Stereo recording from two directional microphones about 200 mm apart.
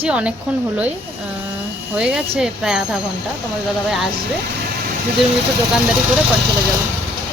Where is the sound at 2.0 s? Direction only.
5° right (ahead or behind).